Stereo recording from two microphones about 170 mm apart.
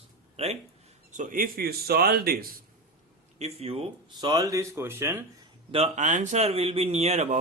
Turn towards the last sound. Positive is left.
turn(degrees=-40)  # may be behind; listen again after turning